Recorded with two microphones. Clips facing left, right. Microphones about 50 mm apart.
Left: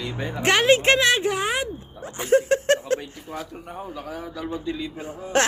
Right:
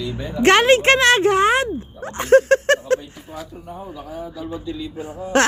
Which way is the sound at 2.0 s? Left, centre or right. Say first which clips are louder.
Right 6 dB; right.